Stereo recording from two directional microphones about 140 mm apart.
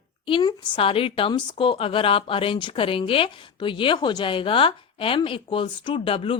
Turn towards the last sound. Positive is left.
turn(degrees=40)  # may be behind; listen again after turning